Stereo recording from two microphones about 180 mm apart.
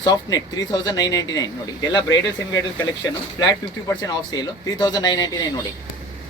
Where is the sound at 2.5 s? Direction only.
15° left (ahead or behind).